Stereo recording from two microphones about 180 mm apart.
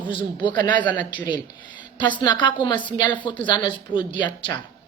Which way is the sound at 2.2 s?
25° left (ahead or behind).